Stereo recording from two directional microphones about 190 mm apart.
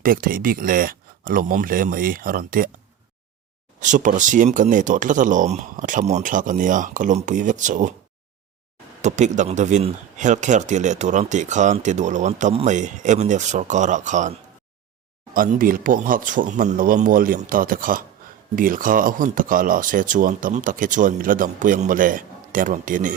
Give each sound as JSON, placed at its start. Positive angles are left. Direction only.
{"t": 0.0, "sound": "speech", "side_deg": -45}
{"t": 3.8, "sound": "speech", "side_deg": -40}
{"t": 9.0, "sound": "speech", "side_deg": -40}